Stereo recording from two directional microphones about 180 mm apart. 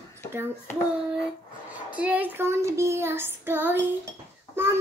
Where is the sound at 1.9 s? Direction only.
10° right (ahead or behind).